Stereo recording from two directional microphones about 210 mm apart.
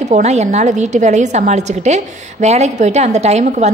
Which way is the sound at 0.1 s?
30° right (ahead or behind).